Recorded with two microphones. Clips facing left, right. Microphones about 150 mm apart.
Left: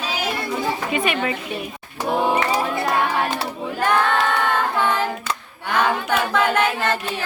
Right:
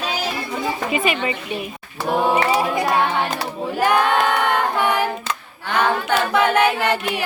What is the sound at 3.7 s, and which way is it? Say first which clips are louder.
Child singing: right 2 dB; 10° right (ahead or behind).